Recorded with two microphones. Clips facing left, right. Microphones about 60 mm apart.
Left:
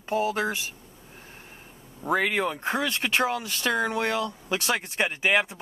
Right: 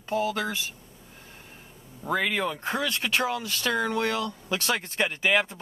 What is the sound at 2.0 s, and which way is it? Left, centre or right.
Speech, left.